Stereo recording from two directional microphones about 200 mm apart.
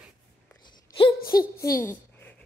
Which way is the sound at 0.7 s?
25° left (ahead or behind).